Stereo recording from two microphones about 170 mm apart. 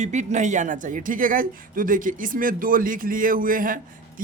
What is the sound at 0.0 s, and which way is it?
Speech, 45° right (ahead or behind).